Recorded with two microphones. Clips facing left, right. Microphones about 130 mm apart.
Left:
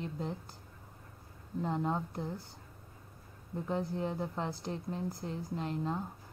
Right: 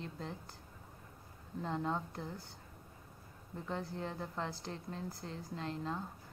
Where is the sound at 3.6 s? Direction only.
15° left (ahead or behind).